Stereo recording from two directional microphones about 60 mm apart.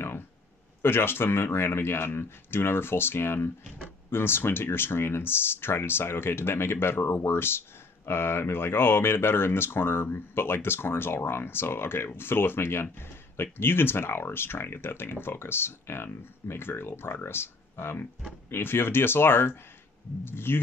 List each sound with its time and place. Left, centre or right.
0.8 s speech: left